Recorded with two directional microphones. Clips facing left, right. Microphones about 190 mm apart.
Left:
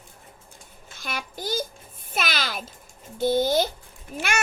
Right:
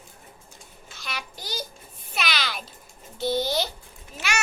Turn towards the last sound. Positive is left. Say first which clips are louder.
# left 3 dB
turn(degrees=55)  # may be behind; listen again after turning